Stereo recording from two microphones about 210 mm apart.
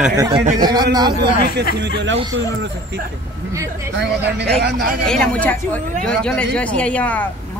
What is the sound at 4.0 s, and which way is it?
Speech, 50° right (ahead or behind).